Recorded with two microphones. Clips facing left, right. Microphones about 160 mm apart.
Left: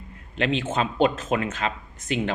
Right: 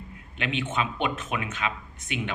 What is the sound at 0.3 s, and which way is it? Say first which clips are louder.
Speech: left 5 dB; 40° left (ahead or behind).